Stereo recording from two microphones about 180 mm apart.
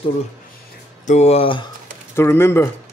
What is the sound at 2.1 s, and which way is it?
Speech, 15° left (ahead or behind).